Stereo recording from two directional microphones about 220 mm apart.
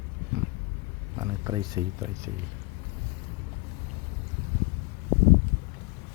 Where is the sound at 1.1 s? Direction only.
20° right (ahead or behind).